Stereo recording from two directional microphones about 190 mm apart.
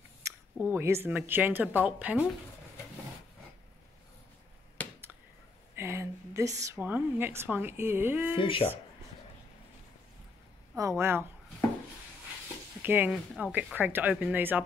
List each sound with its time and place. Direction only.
0.2 s speech: 10° right (ahead or behind)
4.8 s finger snapping: 10° left (ahead or behind)
5.8 s a woman's voice: 15° right (ahead or behind)
8.4 s speech: 25° left (ahead or behind)
10.8 s speech: 15° right (ahead or behind)
12.8 s speech: 10° right (ahead or behind)